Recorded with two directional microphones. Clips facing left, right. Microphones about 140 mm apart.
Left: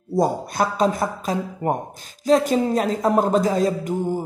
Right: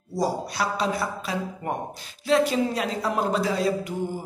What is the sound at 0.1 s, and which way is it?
A woman's voice, 50° left (ahead or behind).